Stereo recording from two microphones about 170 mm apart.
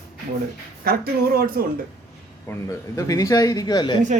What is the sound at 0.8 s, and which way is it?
Speech, 60° right (ahead or behind).